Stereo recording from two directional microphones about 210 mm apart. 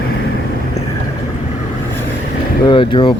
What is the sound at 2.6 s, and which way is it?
Speech, 25° left (ahead or behind).